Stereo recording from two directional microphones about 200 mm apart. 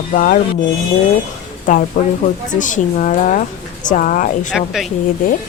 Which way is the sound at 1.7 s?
40° left (ahead or behind).